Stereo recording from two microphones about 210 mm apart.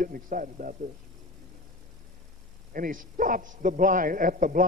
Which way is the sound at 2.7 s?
40° right (ahead or behind).